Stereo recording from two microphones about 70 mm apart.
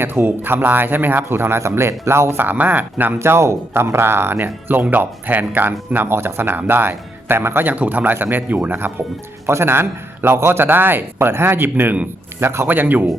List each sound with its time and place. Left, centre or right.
0.0 s speech: right
3.2 s a man's voice: right